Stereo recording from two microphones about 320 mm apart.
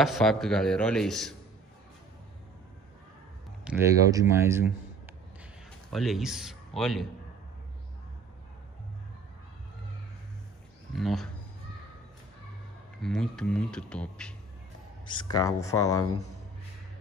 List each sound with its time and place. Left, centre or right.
0.0 s a man's voice: centre
3.6 s speech: centre
5.9 s a man's voice: centre
11.0 s a man's voice: centre
13.0 s a man's voice: centre
15.3 s speech: centre